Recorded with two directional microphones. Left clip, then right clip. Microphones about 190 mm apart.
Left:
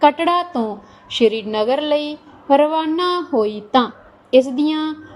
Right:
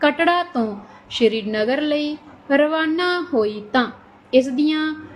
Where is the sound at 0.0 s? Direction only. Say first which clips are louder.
Left 3 dB; 25° left (ahead or behind).